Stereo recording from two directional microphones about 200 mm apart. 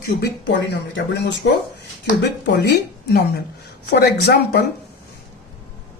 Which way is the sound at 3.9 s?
55° left (ahead or behind).